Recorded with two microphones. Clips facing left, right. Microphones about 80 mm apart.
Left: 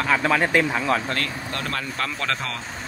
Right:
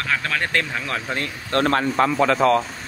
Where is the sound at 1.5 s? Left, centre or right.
Right.